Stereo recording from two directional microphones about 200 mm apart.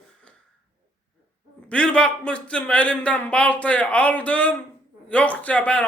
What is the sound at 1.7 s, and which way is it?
Speech, 5° left (ahead or behind).